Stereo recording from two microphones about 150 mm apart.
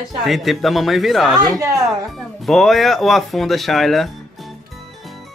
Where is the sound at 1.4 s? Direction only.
25° right (ahead or behind).